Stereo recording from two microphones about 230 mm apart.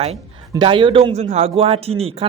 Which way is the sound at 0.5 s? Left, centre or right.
Right.